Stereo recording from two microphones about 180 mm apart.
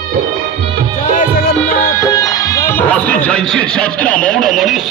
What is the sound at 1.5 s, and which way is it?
Music, 10° left (ahead or behind).